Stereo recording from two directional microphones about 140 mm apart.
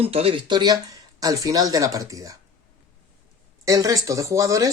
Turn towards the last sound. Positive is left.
turn(degrees=-20)  # may be behind; listen again after turning